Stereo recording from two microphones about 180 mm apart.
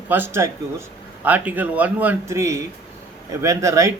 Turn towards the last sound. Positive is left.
turn(degrees=-15)  # may be behind; listen again after turning